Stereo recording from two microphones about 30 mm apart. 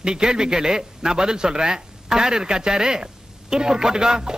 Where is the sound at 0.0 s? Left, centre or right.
Right.